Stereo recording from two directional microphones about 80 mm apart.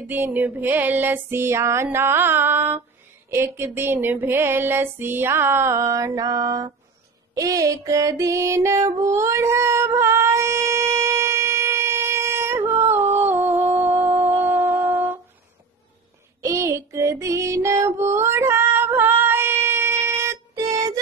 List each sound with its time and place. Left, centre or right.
0.0 s female singing: right
7.3 s music: right
16.3 s child singing: right
17.6 s female singing: right
20.5 s music: right